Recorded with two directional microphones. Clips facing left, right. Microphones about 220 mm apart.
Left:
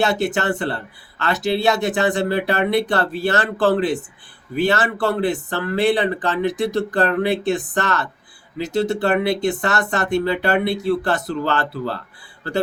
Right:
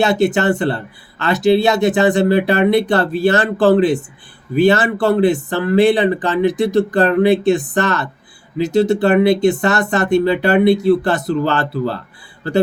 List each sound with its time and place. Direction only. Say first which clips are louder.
0.0 s speech: right 5 dB; 15° right (ahead or behind)